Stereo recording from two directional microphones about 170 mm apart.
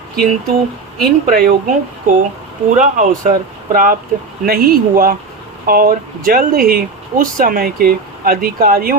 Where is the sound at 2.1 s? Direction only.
50° right (ahead or behind).